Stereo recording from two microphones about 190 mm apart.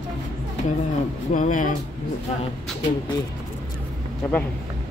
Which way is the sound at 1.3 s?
45° left (ahead or behind).